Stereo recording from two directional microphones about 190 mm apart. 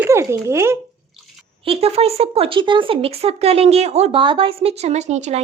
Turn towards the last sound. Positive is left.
turn(degrees=-35)  # may be behind; listen again after turning